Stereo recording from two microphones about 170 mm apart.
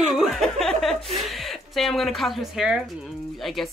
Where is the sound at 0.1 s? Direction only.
Centre (ahead or behind).